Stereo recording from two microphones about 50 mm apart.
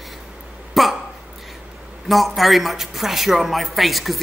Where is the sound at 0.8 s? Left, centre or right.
Centre.